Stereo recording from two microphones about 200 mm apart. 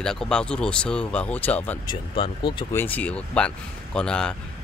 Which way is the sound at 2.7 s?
10° left (ahead or behind).